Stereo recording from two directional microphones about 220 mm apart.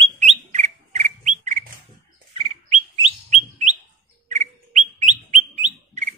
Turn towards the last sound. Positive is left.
turn(degrees=-35)  # may be behind; listen again after turning